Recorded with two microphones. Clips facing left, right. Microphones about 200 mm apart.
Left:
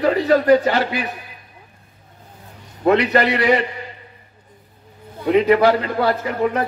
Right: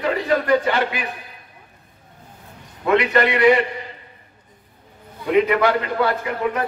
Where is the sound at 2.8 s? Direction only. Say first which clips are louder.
Left 2 dB; 35° left (ahead or behind).